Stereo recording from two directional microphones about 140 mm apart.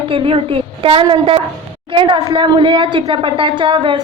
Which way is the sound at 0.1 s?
40° right (ahead or behind).